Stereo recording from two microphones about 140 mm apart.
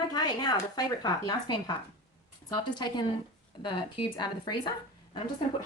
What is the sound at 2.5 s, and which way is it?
A woman's voice, 30° left (ahead or behind).